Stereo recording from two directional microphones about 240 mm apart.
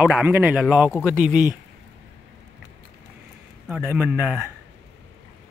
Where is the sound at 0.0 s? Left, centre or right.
Centre.